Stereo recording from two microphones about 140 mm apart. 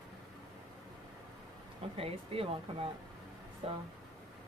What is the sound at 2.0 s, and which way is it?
Speech, 45° right (ahead or behind).